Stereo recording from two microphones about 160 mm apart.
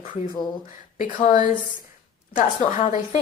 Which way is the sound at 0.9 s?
55° left (ahead or behind).